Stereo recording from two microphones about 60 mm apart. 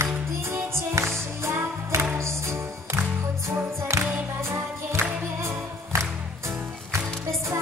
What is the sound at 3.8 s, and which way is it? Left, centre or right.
Music, right.